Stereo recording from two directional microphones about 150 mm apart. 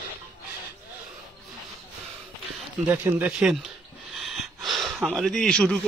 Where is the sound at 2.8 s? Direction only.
10° right (ahead or behind).